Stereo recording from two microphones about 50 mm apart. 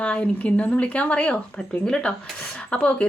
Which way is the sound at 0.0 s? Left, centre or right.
Left.